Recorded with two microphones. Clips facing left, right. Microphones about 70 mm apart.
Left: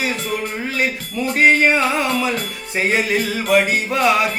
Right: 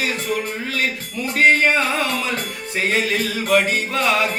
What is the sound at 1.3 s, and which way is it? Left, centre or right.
Music, centre.